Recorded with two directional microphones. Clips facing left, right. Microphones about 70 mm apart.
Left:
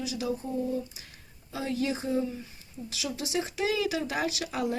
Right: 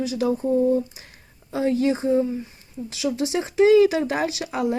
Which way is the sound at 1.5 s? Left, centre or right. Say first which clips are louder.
Right 9 dB; right.